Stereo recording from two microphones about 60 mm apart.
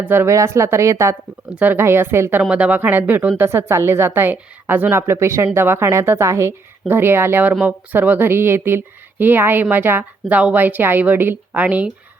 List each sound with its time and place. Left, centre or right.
0.0 s speech: right
0.3 s a woman's voice: right
1.5 s speech: right
1.8 s a woman's voice: right
2.4 s speech: centre
3.3 s a woman's voice: right
6.8 s speech: right
8.3 s speech: right
10.0 s speech: right